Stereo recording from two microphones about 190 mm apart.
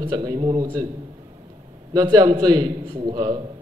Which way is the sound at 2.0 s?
20° right (ahead or behind).